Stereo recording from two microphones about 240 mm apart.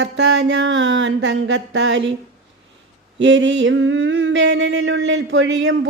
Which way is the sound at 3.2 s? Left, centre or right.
Right.